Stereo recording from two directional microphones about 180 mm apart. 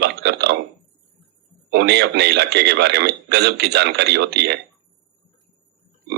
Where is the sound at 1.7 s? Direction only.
70° right (ahead or behind).